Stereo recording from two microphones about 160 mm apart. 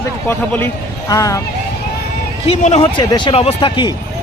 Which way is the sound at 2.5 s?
40° left (ahead or behind).